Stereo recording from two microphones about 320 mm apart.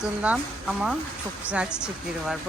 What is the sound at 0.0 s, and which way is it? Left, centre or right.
Speech, centre.